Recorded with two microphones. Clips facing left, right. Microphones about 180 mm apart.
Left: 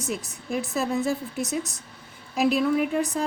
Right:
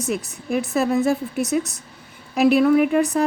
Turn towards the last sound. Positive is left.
turn(degrees=-65)  # may be behind; listen again after turning